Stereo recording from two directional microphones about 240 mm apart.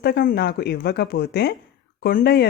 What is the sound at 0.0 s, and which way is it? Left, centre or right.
Speech, left.